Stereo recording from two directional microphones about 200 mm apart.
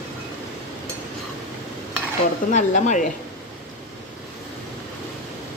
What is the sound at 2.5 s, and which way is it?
Speech, 40° left (ahead or behind).